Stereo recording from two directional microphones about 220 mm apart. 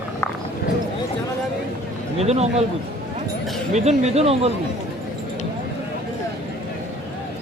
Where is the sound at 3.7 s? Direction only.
30° right (ahead or behind).